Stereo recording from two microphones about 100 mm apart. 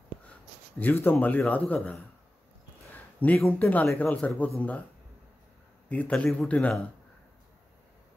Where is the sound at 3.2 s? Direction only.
15° left (ahead or behind).